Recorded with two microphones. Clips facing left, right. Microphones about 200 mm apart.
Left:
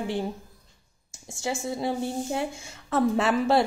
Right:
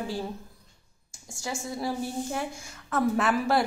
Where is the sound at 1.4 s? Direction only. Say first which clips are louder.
Left 4 dB; 25° left (ahead or behind).